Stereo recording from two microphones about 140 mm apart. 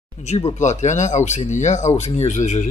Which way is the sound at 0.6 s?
60° left (ahead or behind).